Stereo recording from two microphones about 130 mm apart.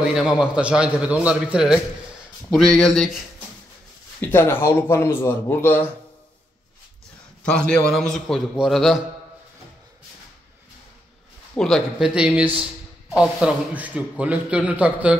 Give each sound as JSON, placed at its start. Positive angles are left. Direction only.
{"t": 0.0, "sound": "a man's voice", "side_deg": -5}
{"t": 4.2, "sound": "speech", "side_deg": 15}
{"t": 7.4, "sound": "a man's voice", "side_deg": 5}
{"t": 11.5, "sound": "a man's voice", "side_deg": 5}
{"t": 13.1, "sound": "a man's voice", "side_deg": -5}